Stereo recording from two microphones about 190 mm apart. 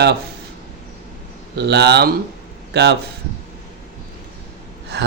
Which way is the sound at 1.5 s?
60° right (ahead or behind).